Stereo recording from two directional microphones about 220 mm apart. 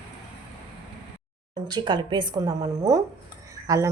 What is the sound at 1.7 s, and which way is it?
A woman's voice, 20° right (ahead or behind).